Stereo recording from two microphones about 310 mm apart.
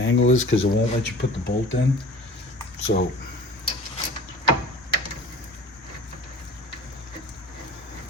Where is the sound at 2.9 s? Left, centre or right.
Left.